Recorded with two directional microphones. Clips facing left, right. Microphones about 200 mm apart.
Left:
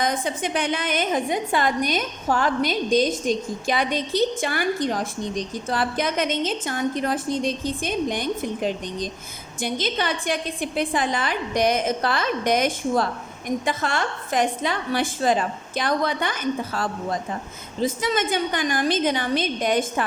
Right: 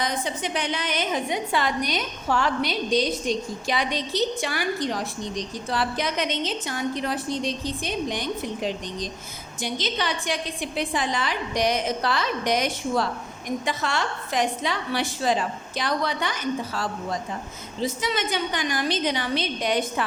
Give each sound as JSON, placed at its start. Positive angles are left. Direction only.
{"t": 0.0, "sound": "a woman's voice", "side_deg": 50}